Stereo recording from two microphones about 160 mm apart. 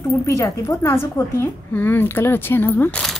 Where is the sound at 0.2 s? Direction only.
20° left (ahead or behind).